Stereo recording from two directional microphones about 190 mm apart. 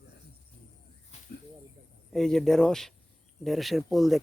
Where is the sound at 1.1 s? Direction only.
35° left (ahead or behind).